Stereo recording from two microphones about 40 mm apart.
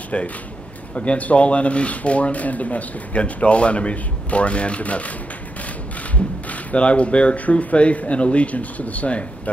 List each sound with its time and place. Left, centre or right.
0.1 s a man's voice: left
6.1 s speech: left